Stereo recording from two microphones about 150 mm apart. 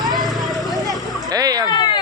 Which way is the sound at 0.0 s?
25° right (ahead or behind).